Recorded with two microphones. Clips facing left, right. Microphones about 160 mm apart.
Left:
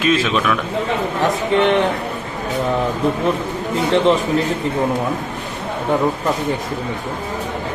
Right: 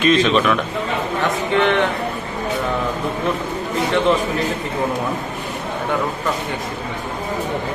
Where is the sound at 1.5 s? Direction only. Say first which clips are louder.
Left 2 dB; 35° left (ahead or behind).